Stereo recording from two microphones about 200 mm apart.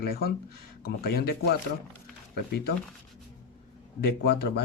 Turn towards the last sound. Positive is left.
turn(degrees=55)  # may be behind; listen again after turning